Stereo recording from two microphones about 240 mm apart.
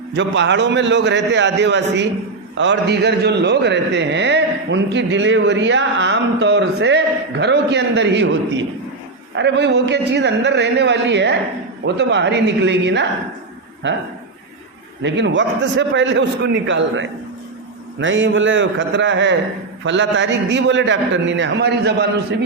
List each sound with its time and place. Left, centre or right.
0.1 s a man's voice: right
15.0 s a man's voice: right